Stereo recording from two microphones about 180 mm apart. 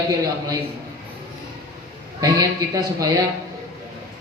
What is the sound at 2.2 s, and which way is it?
Speech, 20° right (ahead or behind).